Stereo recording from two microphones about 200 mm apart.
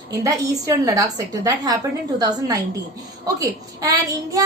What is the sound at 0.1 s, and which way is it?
Speech, 15° right (ahead or behind).